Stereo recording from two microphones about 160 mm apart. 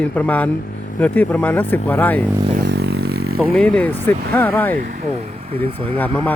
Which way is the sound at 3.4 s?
5° left (ahead or behind).